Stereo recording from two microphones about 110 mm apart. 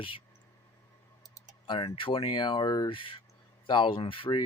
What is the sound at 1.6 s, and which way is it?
Speech, 50° left (ahead or behind).